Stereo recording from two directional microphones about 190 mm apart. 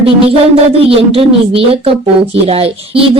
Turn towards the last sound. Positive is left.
turn(degrees=-30)  # may be behind; listen again after turning